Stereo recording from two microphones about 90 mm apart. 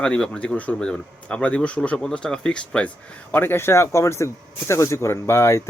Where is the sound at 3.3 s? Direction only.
25° left (ahead or behind).